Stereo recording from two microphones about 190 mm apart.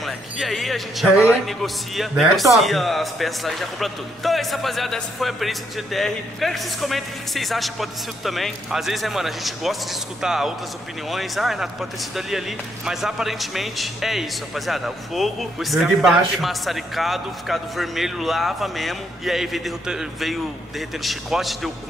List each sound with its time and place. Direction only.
0.0 s speech: centre (ahead or behind)